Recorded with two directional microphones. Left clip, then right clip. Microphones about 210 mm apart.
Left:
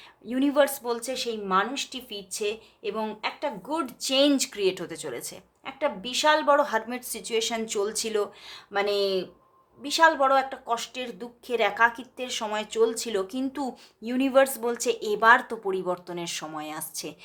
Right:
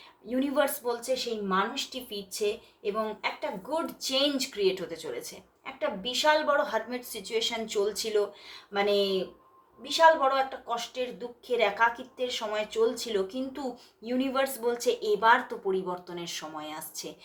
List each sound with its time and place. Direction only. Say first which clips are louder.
0.3 s speech: left 4 dB; 40° left (ahead or behind)